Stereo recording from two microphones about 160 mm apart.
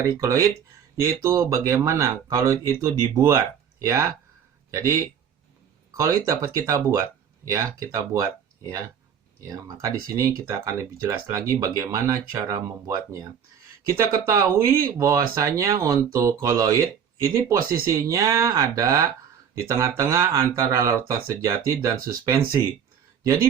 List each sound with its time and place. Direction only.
0.2 s speech: 20° right (ahead or behind)